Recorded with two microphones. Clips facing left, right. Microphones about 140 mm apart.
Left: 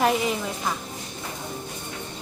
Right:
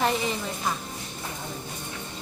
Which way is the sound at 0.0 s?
5° left (ahead or behind).